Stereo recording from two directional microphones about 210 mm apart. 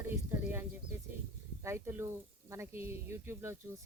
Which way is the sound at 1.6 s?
10° right (ahead or behind).